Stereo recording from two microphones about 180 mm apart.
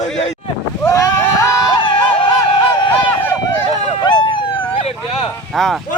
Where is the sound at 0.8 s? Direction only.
15° left (ahead or behind).